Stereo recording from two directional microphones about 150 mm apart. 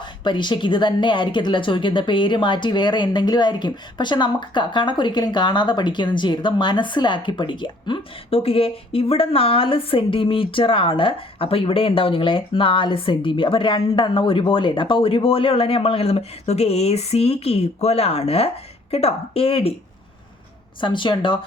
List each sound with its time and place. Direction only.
0.0 s speech: 30° left (ahead or behind)
20.8 s speech: 35° left (ahead or behind)